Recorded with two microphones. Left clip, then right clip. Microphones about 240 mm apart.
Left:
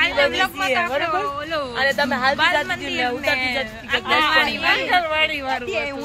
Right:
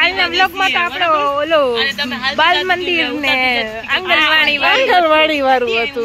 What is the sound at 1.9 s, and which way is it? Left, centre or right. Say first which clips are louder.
Speech: right 2 dB; left.